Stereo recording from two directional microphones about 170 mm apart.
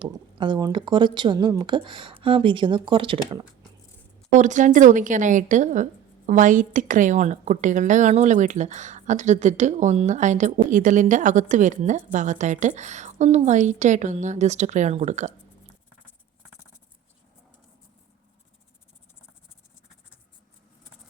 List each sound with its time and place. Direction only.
0.0 s speech: 30° right (ahead or behind)
4.4 s speech: 45° right (ahead or behind)